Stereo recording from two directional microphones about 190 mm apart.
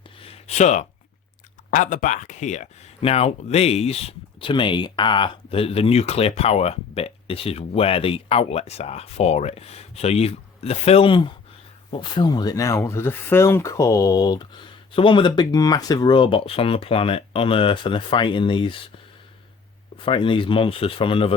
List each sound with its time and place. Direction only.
0.2 s a sound: 30° left (ahead or behind)
1.7 s speech: 45° left (ahead or behind); by 18.8 s 25° left (ahead or behind)
20.0 s speech: 25° left (ahead or behind)